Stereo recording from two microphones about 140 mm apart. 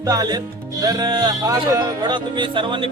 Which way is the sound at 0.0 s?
25° right (ahead or behind).